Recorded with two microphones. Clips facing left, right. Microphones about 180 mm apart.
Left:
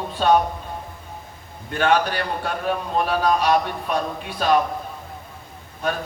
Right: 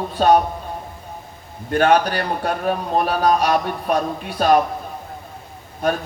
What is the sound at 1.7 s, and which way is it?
A man's voice, 45° right (ahead or behind).